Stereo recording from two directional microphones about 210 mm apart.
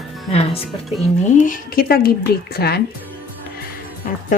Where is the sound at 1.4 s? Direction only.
40° left (ahead or behind).